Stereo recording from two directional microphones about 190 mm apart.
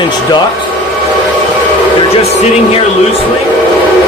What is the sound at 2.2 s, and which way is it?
Speech, 35° left (ahead or behind).